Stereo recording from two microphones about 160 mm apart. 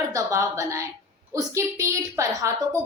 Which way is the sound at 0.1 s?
20° right (ahead or behind).